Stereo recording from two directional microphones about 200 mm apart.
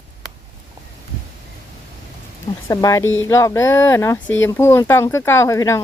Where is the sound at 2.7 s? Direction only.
15° left (ahead or behind).